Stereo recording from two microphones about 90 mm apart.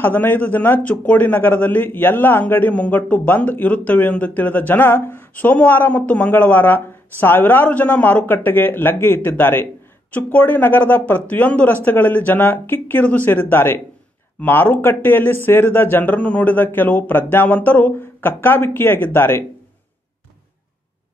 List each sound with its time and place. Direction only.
0.0 s speech: 20° left (ahead or behind)